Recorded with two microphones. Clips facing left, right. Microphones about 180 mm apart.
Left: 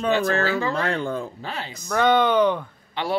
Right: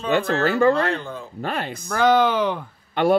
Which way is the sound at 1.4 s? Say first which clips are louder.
Right 6 dB; 55° right (ahead or behind).